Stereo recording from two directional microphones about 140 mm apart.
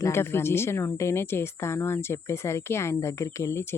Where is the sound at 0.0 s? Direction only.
20° left (ahead or behind).